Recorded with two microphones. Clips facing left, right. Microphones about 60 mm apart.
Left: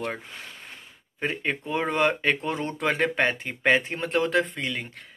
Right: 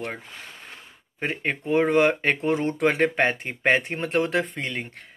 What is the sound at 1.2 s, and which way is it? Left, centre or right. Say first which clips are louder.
Speech: right 1 dB; right.